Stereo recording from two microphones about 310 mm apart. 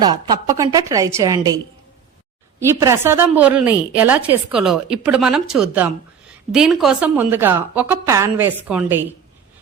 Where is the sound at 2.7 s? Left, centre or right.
Centre.